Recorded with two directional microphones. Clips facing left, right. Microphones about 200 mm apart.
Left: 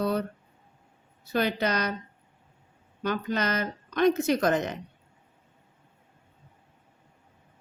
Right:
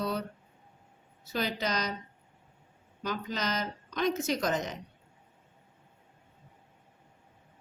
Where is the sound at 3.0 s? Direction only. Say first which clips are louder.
Left 6 dB; 60° left (ahead or behind).